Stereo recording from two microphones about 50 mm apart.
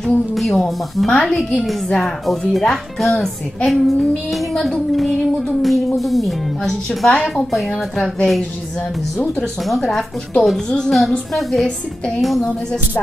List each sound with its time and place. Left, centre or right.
0.0 s a woman's voice: centre
7.1 s a woman's voice: centre
7.5 s a woman's voice: centre
9.7 s a woman's voice: centre